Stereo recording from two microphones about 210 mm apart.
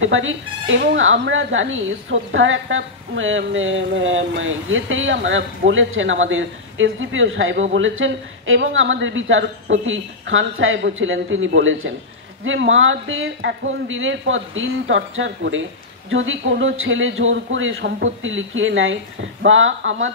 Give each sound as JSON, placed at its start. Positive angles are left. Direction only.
{"t": 0.0, "sound": "a woman's voice", "side_deg": -65}